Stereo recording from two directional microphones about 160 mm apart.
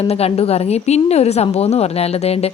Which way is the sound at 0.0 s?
40° left (ahead or behind).